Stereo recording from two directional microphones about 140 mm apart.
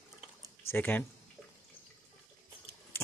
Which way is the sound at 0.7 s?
15° left (ahead or behind).